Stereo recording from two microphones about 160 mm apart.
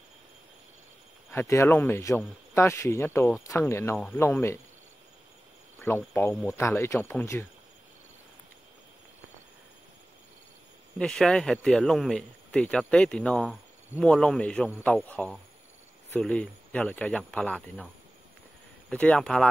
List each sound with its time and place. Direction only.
1.3 s speech: 15° left (ahead or behind)
5.8 s speech: 15° left (ahead or behind)
11.0 s speech: 5° left (ahead or behind)
18.9 s speech: 5° left (ahead or behind)